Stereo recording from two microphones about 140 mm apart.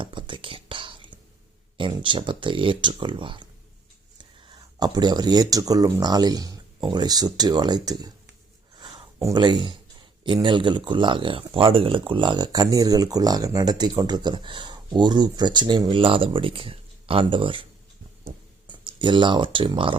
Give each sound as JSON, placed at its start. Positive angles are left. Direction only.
{"t": 0.0, "sound": "whispering", "side_deg": -35}
{"t": 2.0, "sound": "speech", "side_deg": -35}
{"t": 4.8, "sound": "speech", "side_deg": -30}
{"t": 9.1, "sound": "speech", "side_deg": -20}
{"t": 9.4, "sound": "speech", "side_deg": -35}
{"t": 18.7, "sound": "speech", "side_deg": -35}